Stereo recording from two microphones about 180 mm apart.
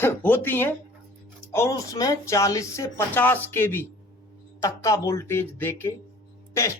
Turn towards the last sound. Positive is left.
turn(degrees=15)  # may be behind; listen again after turning